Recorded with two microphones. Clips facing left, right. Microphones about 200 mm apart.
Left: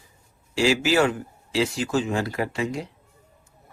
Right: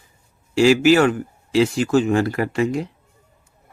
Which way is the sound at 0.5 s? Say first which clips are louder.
Right 7 dB; 55° right (ahead or behind).